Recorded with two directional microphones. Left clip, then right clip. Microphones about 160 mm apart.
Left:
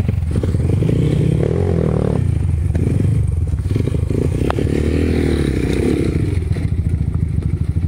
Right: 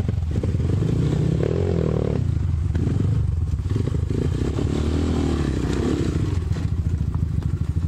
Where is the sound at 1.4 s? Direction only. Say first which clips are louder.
Left 3 dB; 35° left (ahead or behind).